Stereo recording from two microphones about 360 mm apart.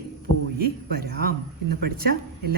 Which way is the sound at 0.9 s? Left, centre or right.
Right.